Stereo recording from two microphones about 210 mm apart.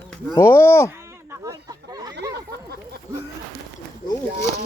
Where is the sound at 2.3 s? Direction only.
50° right (ahead or behind).